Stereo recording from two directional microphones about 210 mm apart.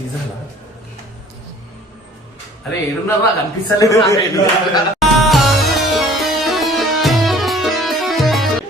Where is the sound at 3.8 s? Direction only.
15° left (ahead or behind).